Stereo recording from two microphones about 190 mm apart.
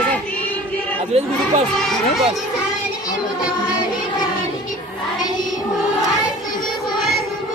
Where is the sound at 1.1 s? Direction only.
35° right (ahead or behind).